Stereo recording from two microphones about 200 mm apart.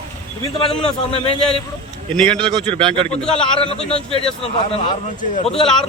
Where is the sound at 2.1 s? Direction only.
5° left (ahead or behind).